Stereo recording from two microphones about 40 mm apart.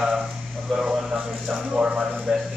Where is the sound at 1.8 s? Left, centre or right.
Right.